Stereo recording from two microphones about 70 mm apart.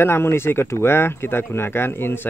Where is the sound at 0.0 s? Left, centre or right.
Left.